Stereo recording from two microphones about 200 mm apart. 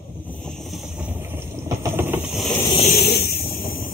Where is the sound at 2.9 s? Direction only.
50° left (ahead or behind).